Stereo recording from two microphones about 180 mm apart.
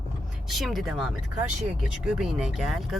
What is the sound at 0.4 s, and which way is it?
Speech, centre (ahead or behind).